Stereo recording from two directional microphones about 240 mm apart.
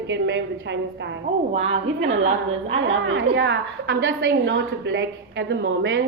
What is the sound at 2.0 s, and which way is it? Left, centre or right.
A woman's voice, right.